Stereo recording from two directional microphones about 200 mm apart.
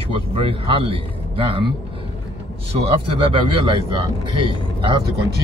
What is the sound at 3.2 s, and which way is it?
Speech, 25° right (ahead or behind).